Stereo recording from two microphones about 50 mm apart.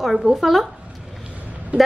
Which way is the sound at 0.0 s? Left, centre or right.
Centre.